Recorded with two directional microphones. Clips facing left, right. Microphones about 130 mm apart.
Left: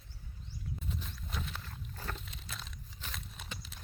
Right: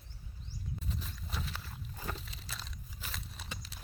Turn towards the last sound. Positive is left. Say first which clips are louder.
# even
turn(degrees=0)  # may be behind; listen again after turning